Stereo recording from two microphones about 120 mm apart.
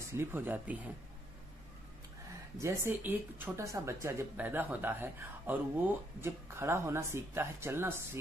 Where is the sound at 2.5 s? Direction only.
20° right (ahead or behind).